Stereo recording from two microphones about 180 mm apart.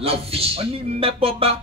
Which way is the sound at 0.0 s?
35° right (ahead or behind).